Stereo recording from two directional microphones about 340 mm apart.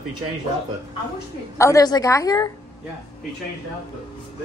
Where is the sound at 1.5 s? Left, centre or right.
Centre.